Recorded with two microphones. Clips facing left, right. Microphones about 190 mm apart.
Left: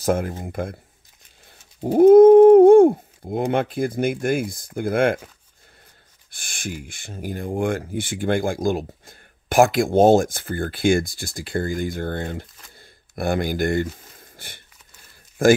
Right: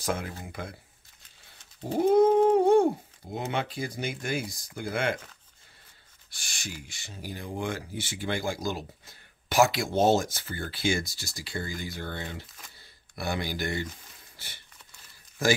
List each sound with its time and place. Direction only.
0.0 s speech: 45° left (ahead or behind)
1.8 s speech: 50° left (ahead or behind)
6.3 s speech: 55° left (ahead or behind)
14.3 s sniff: 50° left (ahead or behind)
15.4 s speech: 50° left (ahead or behind)